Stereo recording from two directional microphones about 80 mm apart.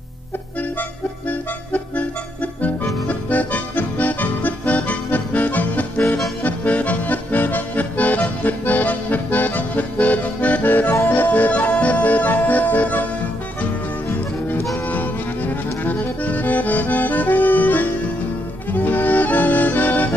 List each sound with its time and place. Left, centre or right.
1.7 s accordion: centre
11.0 s music: left
14.9 s accordion: left
18.7 s music: left